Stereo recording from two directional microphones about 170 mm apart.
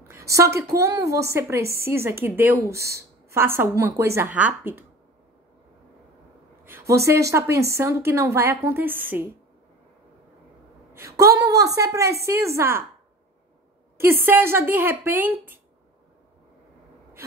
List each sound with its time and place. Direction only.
0.3 s a woman's voice: 15° right (ahead or behind)
6.6 s a woman's voice: 15° right (ahead or behind)
10.9 s a sound: 15° right (ahead or behind)
11.3 s a woman's voice: 20° right (ahead or behind)
13.9 s a woman's voice: 15° right (ahead or behind)